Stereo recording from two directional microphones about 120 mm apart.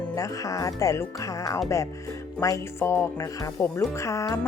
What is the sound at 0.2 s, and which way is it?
Music, 30° left (ahead or behind).